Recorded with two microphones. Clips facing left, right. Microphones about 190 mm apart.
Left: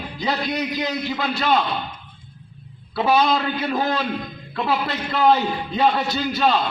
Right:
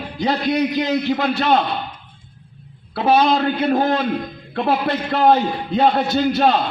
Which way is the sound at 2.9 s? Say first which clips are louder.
Right 3 dB; 55° right (ahead or behind).